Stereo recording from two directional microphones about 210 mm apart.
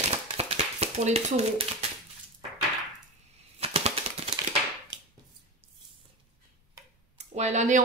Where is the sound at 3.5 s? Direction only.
30° right (ahead or behind).